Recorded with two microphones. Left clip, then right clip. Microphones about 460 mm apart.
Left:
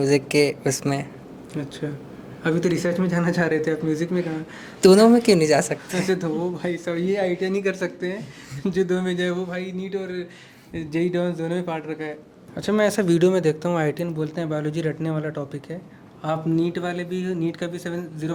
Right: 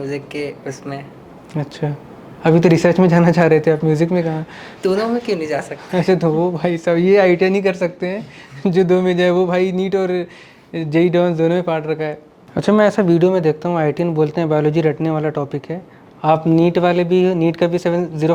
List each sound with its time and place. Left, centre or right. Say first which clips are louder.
0.0 s speech: left 5 dB; left
1.8 s speech: right 6 dB; centre
4.8 s speech: left 4 dB; left
6.0 s speech: right 10 dB; centre
9.5 s speech: right 12 dB; right
10.7 s speech: right 9 dB; centre
16.2 s speech: right 10 dB; right